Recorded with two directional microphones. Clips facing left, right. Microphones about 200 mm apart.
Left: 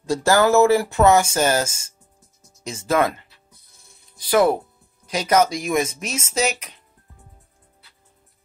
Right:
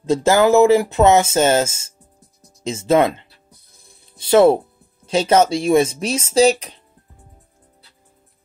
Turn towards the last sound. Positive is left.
turn(degrees=-30)  # may be behind; listen again after turning